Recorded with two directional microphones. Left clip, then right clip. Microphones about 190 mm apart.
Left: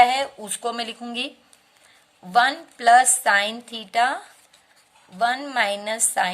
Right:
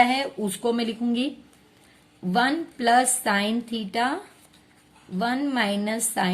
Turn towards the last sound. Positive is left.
turn(degrees=30)  # may be behind; listen again after turning